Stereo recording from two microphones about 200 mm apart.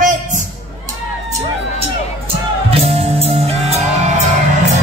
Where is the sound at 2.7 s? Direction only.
30° right (ahead or behind).